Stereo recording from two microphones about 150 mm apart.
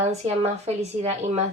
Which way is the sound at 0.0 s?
45° right (ahead or behind).